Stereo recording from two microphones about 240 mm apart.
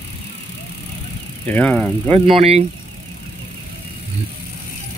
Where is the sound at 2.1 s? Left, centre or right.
Right.